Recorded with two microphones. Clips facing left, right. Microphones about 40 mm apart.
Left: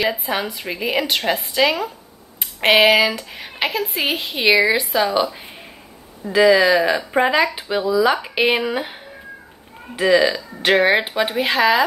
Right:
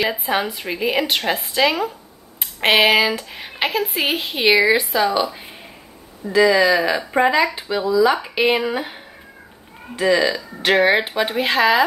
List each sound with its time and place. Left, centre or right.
0.0 s speech: centre
6.3 s speech: centre
6.8 s speech: centre